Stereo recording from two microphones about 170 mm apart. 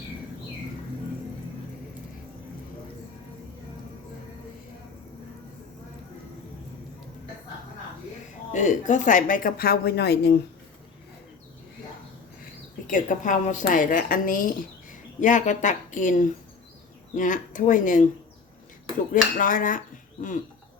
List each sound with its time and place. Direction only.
8.5 s a woman's voice: 45° left (ahead or behind); by 10.4 s 70° left (ahead or behind)
12.9 s a woman's voice: 50° left (ahead or behind)
19.1 s a woman's voice: 50° left (ahead or behind)